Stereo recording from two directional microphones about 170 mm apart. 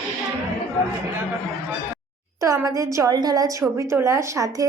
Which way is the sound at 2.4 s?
20° right (ahead or behind).